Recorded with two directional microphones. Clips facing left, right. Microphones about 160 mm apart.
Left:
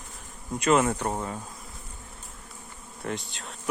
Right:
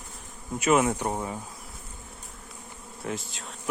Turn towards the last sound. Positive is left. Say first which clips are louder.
# even
turn(degrees=0)  # may be behind; listen again after turning